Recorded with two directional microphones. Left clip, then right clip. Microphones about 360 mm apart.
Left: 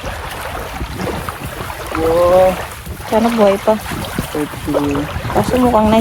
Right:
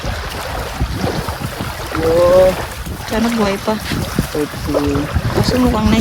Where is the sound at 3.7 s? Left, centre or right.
Centre.